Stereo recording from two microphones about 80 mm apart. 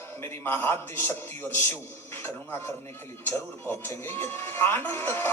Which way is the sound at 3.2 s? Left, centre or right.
Left.